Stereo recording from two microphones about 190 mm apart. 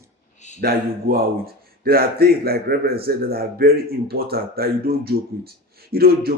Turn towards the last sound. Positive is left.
turn(degrees=-55)  # may be behind; listen again after turning